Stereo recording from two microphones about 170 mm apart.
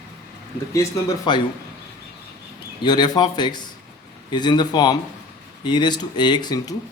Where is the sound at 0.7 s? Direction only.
20° left (ahead or behind).